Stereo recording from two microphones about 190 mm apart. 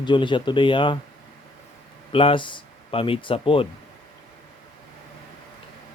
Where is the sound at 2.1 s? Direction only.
25° left (ahead or behind).